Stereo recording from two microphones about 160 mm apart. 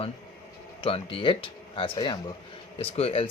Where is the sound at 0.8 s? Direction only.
35° left (ahead or behind).